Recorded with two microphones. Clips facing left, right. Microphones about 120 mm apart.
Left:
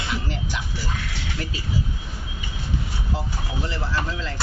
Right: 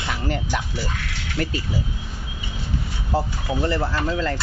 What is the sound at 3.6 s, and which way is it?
Speech, 50° right (ahead or behind).